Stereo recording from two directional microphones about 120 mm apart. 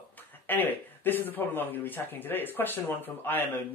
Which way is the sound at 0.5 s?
15° left (ahead or behind).